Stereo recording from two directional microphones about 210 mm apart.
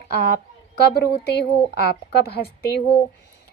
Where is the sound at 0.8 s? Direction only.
50° left (ahead or behind).